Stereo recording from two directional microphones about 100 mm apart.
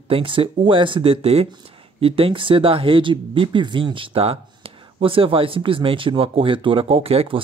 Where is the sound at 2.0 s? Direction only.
65° right (ahead or behind).